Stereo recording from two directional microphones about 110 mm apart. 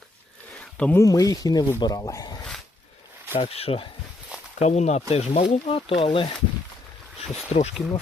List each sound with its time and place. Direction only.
0.6 s a sound: 10° left (ahead or behind)
0.9 s speech: 30° left (ahead or behind)
3.3 s speech: 65° left (ahead or behind)
4.6 s speech: 90° left
5.1 s speech: 70° left (ahead or behind); by 6.3 s 50° left (ahead or behind)
7.2 s speech: 70° left (ahead or behind)